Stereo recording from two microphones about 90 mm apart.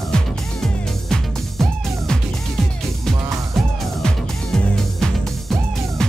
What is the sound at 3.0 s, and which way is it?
Music, 5° left (ahead or behind).